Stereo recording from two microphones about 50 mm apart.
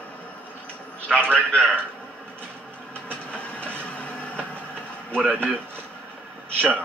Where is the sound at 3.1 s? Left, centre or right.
Left.